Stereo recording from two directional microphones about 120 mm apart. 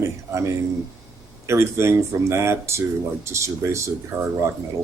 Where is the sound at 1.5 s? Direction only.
20° right (ahead or behind).